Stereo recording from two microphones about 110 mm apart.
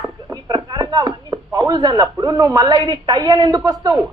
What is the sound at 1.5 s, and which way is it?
A woman's voice, 35° right (ahead or behind).